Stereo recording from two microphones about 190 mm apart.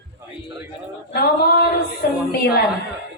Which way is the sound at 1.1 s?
55° left (ahead or behind).